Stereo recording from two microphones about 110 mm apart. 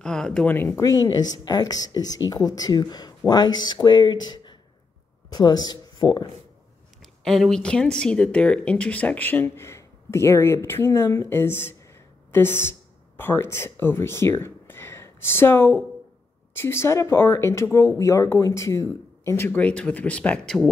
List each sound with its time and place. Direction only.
0.0 s speech: 5° left (ahead or behind)
0.5 s speech: 20° left (ahead or behind)
0.8 s speech: 35° left (ahead or behind)
7.0 s speech: centre (ahead or behind)